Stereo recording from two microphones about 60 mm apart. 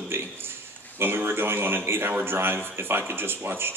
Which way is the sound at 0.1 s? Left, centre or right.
Right.